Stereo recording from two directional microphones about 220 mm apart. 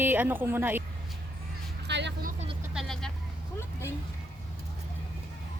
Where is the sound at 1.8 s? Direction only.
50° right (ahead or behind).